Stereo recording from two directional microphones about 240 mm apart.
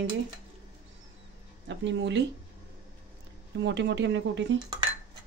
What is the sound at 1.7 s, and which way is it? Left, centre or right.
Speech, right.